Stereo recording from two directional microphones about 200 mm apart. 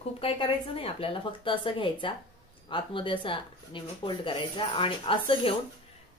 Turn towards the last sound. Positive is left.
turn(degrees=25)  # may be behind; listen again after turning